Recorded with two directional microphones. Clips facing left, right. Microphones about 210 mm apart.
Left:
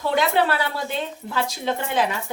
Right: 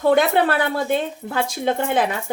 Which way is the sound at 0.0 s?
50° right (ahead or behind).